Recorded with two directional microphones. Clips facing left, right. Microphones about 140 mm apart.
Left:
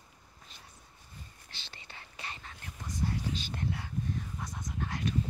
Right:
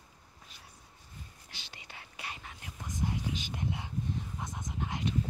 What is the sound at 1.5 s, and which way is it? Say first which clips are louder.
Whispering: even; 10° right (ahead or behind).